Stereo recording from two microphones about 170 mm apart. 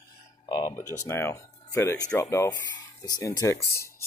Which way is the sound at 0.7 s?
15° left (ahead or behind).